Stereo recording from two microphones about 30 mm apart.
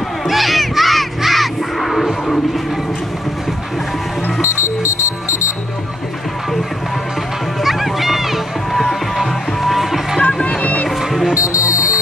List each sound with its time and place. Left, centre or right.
0.3 s a sound: centre
7.6 s music: centre
10.6 s music: left